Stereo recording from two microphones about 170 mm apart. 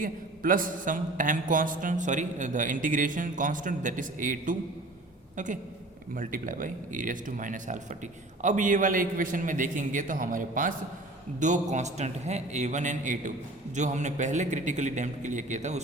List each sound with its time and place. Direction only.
0.0 s speech: 55° right (ahead or behind)
6.1 s speech: 55° right (ahead or behind)